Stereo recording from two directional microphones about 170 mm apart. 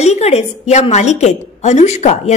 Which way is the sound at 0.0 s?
40° left (ahead or behind).